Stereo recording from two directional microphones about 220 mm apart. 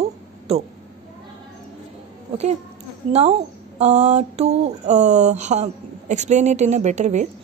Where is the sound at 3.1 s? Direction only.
30° right (ahead or behind).